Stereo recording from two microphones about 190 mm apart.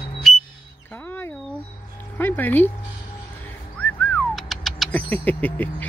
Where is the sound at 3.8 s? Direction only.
5° left (ahead or behind).